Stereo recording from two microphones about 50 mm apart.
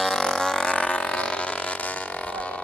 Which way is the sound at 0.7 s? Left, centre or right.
Left.